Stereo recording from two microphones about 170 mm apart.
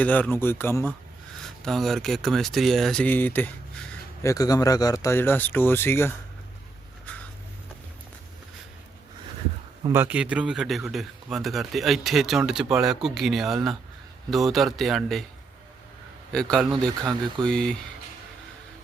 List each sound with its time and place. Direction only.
0.0 s speech: 10° left (ahead or behind)
1.4 s speech: centre (ahead or behind)
7.1 s a sound: 10° left (ahead or behind)
9.8 s speech: 15° right (ahead or behind)
16.3 s speech: 5° left (ahead or behind)
17.0 s speech: 25° right (ahead or behind)
17.4 s speech: 5° left (ahead or behind)